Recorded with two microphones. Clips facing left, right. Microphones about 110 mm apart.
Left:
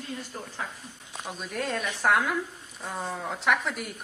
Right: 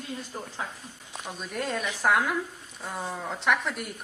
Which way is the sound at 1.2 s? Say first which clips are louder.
Even; centre (ahead or behind).